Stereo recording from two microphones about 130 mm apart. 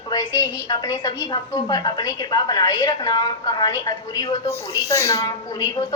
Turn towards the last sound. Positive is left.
turn(degrees=35)  # may be behind; listen again after turning